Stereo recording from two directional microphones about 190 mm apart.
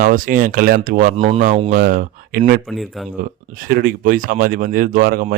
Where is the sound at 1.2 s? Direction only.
35° right (ahead or behind).